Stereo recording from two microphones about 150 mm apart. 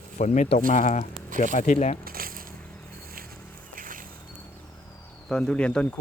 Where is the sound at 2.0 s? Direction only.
75° right (ahead or behind).